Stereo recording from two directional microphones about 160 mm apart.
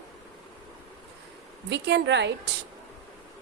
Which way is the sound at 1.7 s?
90° right.